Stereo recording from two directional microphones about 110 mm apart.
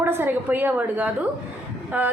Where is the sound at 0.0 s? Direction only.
20° right (ahead or behind).